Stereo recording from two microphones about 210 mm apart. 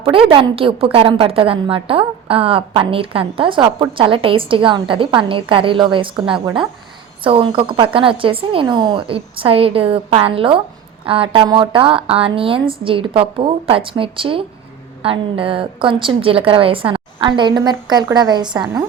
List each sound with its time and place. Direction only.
0.0 s a woman's voice: 25° right (ahead or behind)